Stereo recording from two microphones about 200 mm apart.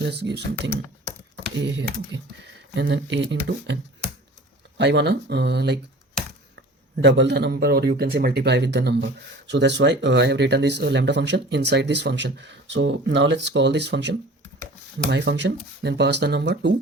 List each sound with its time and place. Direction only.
0.0 s speech: 60° right (ahead or behind)
4.8 s speech: 60° right (ahead or behind)